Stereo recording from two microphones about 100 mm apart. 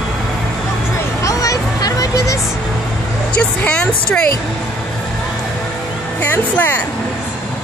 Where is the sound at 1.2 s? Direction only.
35° left (ahead or behind).